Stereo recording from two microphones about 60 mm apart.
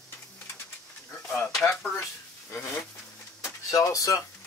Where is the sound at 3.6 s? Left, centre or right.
Left.